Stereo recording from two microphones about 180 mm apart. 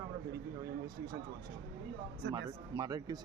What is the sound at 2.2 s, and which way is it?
Speech, 80° right.